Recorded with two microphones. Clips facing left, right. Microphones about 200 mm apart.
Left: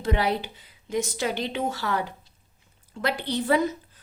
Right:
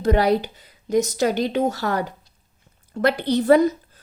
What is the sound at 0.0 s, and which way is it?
A woman's voice, 40° right (ahead or behind).